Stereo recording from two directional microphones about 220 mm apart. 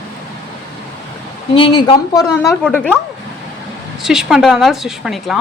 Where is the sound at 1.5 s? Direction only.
20° left (ahead or behind); by 2.9 s 5° left (ahead or behind).